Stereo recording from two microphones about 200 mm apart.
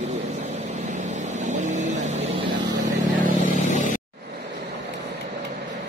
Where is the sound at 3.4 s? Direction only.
40° left (ahead or behind).